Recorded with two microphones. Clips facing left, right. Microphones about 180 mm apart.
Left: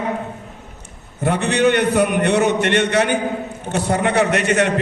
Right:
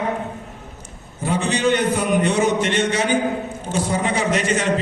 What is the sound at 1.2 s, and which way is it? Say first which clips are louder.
A man's voice: left 3 dB; 65° left (ahead or behind).